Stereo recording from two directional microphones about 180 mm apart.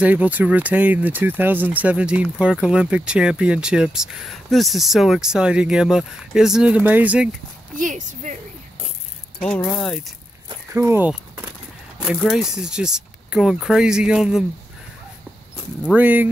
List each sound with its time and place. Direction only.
0.0 s speech: 10° right (ahead or behind)
7.7 s speech: 45° right (ahead or behind)
9.8 s speech: 5° left (ahead or behind)
10.7 s speech: 15° right (ahead or behind)
12.0 s speech: centre (ahead or behind)
15.9 s speech: 10° right (ahead or behind)